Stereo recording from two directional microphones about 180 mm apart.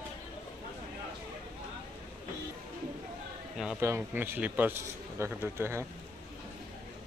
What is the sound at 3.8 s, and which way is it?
A man's voice, 15° right (ahead or behind).